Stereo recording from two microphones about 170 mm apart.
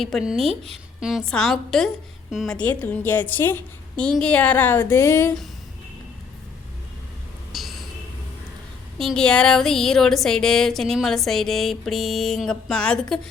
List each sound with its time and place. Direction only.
0.0 s a woman's voice: centre (ahead or behind)
7.5 s a sound: centre (ahead or behind)
9.0 s speech: 5° left (ahead or behind)